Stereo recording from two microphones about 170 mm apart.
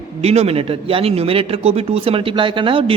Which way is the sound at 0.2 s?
35° right (ahead or behind).